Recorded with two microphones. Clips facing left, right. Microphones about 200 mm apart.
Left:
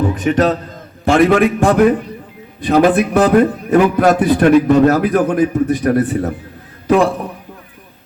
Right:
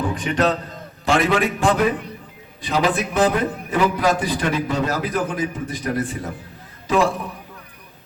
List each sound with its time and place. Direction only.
0.2 s a man's voice: 50° left (ahead or behind)